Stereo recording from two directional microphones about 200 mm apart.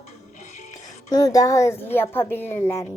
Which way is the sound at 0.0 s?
35° left (ahead or behind).